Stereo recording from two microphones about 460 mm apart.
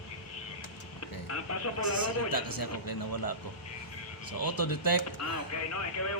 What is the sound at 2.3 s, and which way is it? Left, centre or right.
A man's voice, left.